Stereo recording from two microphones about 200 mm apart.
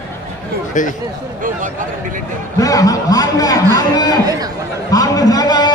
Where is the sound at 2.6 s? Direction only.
15° left (ahead or behind).